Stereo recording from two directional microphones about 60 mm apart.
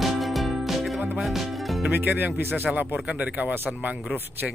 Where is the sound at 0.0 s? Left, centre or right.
Centre.